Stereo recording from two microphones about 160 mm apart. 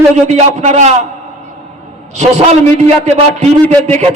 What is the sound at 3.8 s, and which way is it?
Speech, 45° right (ahead or behind).